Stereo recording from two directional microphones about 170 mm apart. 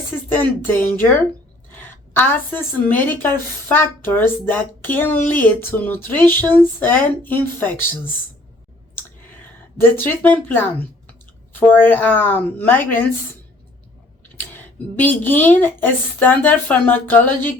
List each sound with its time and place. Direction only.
0.3 s speech: 10° left (ahead or behind)
1.7 s a sound: 10° left (ahead or behind)
2.9 s speech: 10° left (ahead or behind)
9.0 s a sound: 10° left (ahead or behind)
11.6 s speech: 10° left (ahead or behind)
14.3 s speech: 10° left (ahead or behind)